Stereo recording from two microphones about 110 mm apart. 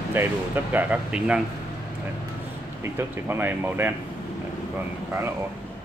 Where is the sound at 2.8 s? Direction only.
20° right (ahead or behind).